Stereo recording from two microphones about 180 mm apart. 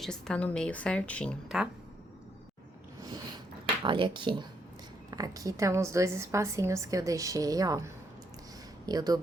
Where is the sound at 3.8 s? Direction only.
30° right (ahead or behind).